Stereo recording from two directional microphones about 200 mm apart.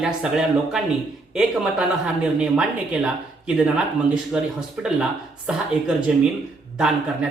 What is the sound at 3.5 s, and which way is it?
Speech, 5° right (ahead or behind).